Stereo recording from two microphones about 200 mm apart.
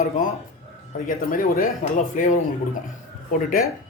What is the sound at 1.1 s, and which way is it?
Speech, 45° left (ahead or behind).